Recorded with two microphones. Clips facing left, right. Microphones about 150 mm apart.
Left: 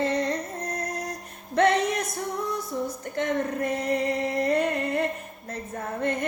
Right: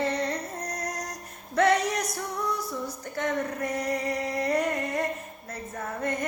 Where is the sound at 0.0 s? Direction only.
20° left (ahead or behind).